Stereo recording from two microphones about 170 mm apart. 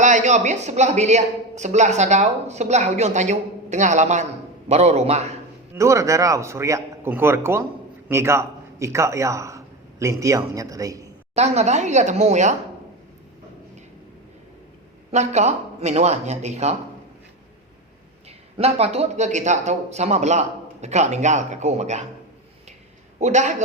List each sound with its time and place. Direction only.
0.0 s a man's voice: 45° right (ahead or behind)
5.7 s a man's voice: 15° right (ahead or behind)
11.3 s a man's voice: 40° right (ahead or behind)
15.1 s speech: 40° right (ahead or behind)
18.5 s a man's voice: 35° right (ahead or behind)
23.2 s a man's voice: 45° right (ahead or behind)